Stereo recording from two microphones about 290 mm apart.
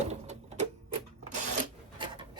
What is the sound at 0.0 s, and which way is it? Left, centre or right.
Sewing machine, right.